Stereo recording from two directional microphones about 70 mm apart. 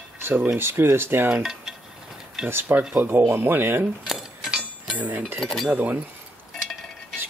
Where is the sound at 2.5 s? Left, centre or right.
Right.